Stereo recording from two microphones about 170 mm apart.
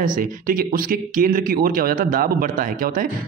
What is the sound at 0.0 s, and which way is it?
Speech, 55° right (ahead or behind).